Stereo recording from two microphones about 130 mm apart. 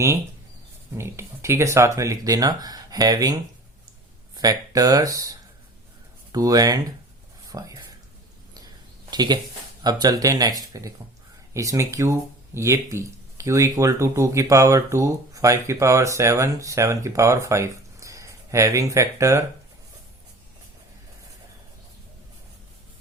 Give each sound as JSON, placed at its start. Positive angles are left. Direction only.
{"t": 0.9, "sound": "speech", "side_deg": -20}
{"t": 4.4, "sound": "speech", "side_deg": -30}
{"t": 7.4, "sound": "whispering", "side_deg": -25}
{"t": 8.5, "sound": "a sound", "side_deg": -30}
{"t": 9.8, "sound": "speech", "side_deg": -30}